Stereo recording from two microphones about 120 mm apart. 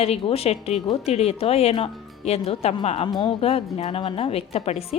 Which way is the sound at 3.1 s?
40° left (ahead or behind).